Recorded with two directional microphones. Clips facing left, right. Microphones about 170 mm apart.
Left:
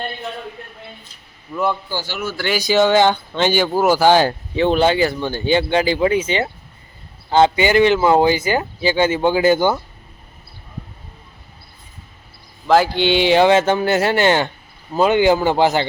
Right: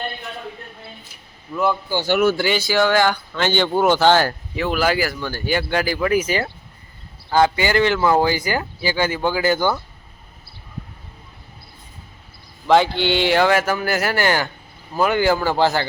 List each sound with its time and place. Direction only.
1.5 s a man's voice: 10° left (ahead or behind)
2.0 s speech: 70° right (ahead or behind)
2.6 s speech: 20° left (ahead or behind)
3.5 s speech: 5° left (ahead or behind)
12.6 s speech: centre (ahead or behind)
12.9 s speech: 15° left (ahead or behind)